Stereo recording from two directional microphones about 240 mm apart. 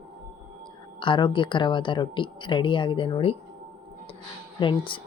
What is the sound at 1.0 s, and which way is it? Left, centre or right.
Speech, left.